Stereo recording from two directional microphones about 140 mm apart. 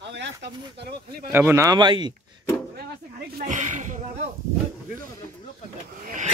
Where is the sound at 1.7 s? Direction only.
35° right (ahead or behind).